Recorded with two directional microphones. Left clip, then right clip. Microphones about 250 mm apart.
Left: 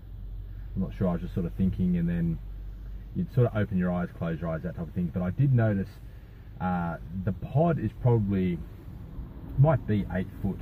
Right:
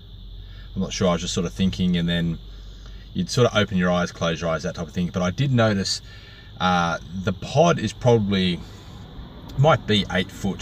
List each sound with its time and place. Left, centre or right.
0.9 s speech: centre
3.3 s speech: centre
9.6 s speech: centre